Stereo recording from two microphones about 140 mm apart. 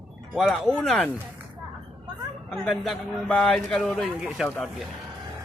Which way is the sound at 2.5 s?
5° left (ahead or behind).